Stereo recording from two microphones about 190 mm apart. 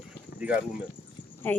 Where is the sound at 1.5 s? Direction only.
10° left (ahead or behind).